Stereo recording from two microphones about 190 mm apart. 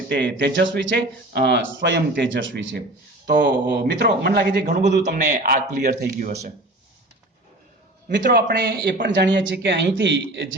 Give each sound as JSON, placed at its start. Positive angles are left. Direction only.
{"t": 0.1, "sound": "speech", "side_deg": -65}
{"t": 4.6, "sound": "a man's voice", "side_deg": -40}
{"t": 8.0, "sound": "speech", "side_deg": -65}